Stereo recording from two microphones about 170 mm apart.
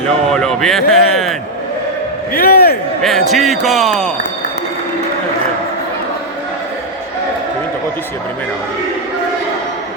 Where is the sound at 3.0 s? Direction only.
Centre (ahead or behind).